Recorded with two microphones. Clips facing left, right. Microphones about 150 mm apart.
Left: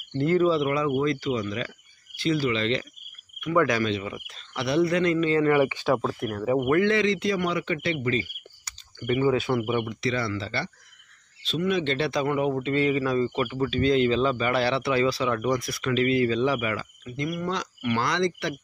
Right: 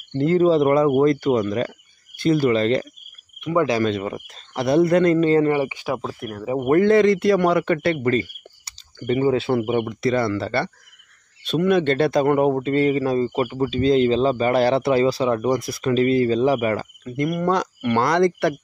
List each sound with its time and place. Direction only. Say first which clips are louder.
0.2 s a man's voice: right 5 dB; 35° right (ahead or behind)
3.3 s speech: right 3 dB; 30° right (ahead or behind)
3.8 s a man's voice: right 5 dB; 45° right (ahead or behind)
5.6 s speech: left 1 dB; 15° right (ahead or behind)
6.6 s a man's voice: right 9 dB; 40° right (ahead or behind)
8.6 s speech: right 4 dB; 30° right (ahead or behind)
10.0 s a man's voice: right 7 dB; 50° right (ahead or behind)